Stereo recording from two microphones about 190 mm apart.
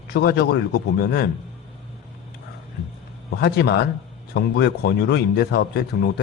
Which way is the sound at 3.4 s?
60° left (ahead or behind).